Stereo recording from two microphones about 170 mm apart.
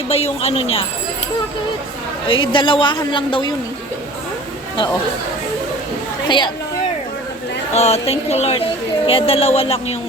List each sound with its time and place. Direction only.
0.1 s music: 35° left (ahead or behind)
2.2 s a woman's voice: 30° left (ahead or behind)
6.2 s speech: 25° left (ahead or behind)
7.7 s music: 40° left (ahead or behind)